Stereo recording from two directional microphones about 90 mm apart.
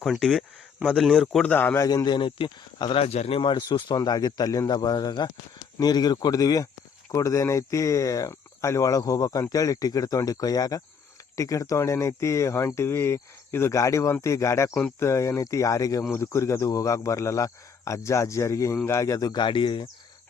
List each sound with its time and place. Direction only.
0.0 s speech: centre (ahead or behind)
1.4 s speech: 20° left (ahead or behind)
1.7 s speech: 35° left (ahead or behind)
2.0 s speech: 60° left (ahead or behind)
2.9 s speech: 90° left; by 19.9 s 65° left (ahead or behind)